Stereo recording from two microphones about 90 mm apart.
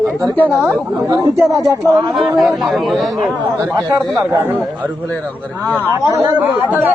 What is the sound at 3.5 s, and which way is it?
Speech, 40° right (ahead or behind).